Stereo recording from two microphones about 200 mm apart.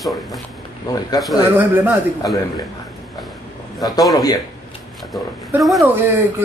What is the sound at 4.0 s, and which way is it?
Speech, 20° left (ahead or behind).